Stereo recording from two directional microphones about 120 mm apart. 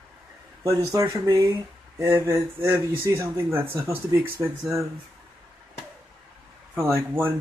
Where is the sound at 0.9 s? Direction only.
25° right (ahead or behind).